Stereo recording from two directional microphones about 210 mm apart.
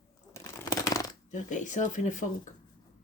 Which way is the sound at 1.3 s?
35° left (ahead or behind).